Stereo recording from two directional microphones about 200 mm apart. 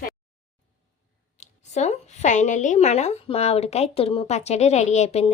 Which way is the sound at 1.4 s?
35° left (ahead or behind).